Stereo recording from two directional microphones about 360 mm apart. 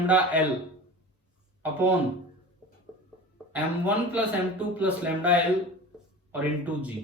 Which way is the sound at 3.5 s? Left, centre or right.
Centre.